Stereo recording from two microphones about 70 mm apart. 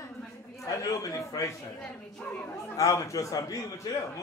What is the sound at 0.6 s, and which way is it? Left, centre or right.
Speech, left.